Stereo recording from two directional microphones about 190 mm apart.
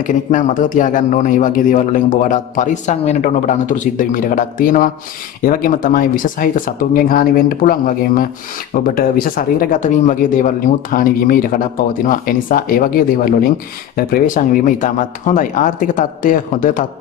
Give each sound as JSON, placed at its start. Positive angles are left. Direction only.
{"t": 0.0, "sound": "speech", "side_deg": 40}